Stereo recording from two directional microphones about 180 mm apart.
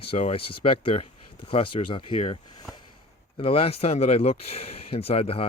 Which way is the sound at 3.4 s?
30° left (ahead or behind).